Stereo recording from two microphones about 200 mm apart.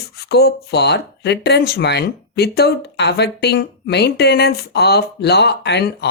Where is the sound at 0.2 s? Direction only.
55° left (ahead or behind).